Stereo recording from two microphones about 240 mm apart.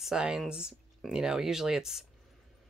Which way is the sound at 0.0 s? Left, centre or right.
Centre.